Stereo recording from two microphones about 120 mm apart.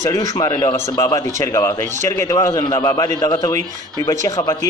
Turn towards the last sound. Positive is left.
turn(degrees=30)  # may be behind; listen again after turning